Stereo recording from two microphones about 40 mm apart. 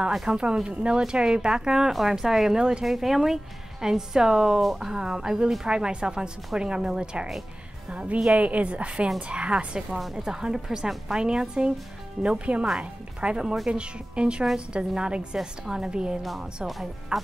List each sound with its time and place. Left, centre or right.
0.3 s speech: right
1.9 s speech: centre
2.8 s a woman's voice: centre; by 9.8 s right
9.8 s speech: centre
15.3 s speech: centre
16.2 s speech: centre